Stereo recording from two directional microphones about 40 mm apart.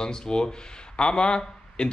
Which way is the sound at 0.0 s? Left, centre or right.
Centre.